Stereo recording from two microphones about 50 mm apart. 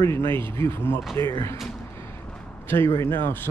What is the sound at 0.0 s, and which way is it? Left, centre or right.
Speech, left.